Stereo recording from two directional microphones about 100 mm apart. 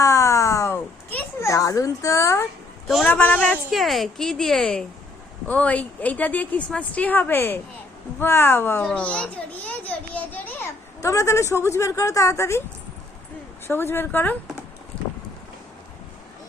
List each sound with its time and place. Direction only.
0.0 s a sound: 30° left (ahead or behind)
1.4 s a child's voice: 30° left (ahead or behind)
2.8 s a man's voice: centre (ahead or behind)
3.1 s speech: 20° left (ahead or behind)
3.7 s a woman's voice: centre (ahead or behind); by 8.9 s 25° left (ahead or behind)
8.9 s a woman's voice: 10° left (ahead or behind)
11.0 s speech: 30° left (ahead or behind)
13.7 s speech: 20° left (ahead or behind)
14.9 s wind: 10° left (ahead or behind)